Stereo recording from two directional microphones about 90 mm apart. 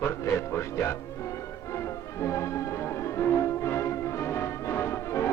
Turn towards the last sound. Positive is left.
turn(degrees=30)  # may be behind; listen again after turning